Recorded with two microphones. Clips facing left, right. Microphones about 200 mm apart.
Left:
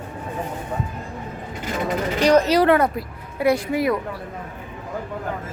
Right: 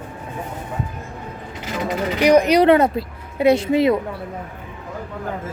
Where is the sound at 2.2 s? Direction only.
10° right (ahead or behind).